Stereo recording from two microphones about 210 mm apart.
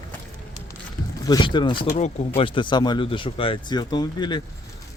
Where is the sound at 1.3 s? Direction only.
20° left (ahead or behind).